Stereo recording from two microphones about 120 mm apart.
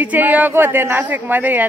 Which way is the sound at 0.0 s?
15° right (ahead or behind).